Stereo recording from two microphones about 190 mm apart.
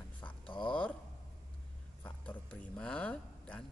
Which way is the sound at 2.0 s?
10° left (ahead or behind).